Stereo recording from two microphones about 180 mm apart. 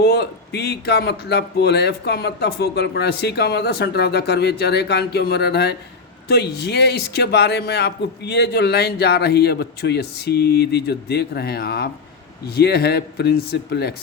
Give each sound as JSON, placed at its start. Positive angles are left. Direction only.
{"t": 0.0, "sound": "speech", "side_deg": 65}